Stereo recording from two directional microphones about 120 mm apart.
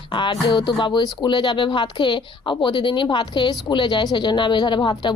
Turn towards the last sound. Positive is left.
turn(degrees=35)  # may be behind; listen again after turning